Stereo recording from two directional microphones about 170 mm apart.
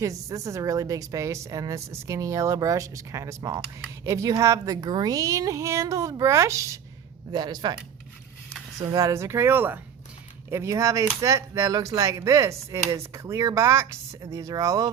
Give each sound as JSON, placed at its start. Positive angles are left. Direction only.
{"t": 0.0, "sound": "a woman's voice", "side_deg": -20}
{"t": 8.8, "sound": "speech", "side_deg": -25}